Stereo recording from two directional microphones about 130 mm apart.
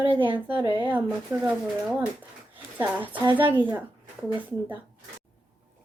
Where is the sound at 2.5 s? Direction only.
15° right (ahead or behind).